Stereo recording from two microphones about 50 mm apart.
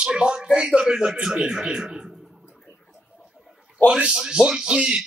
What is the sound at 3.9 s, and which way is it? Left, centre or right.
A man's voice, centre.